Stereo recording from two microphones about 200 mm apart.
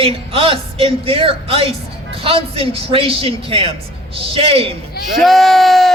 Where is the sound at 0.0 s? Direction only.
30° right (ahead or behind).